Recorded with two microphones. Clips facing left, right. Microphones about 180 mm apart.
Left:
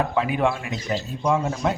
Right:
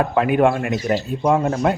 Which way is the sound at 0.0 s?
60° right (ahead or behind).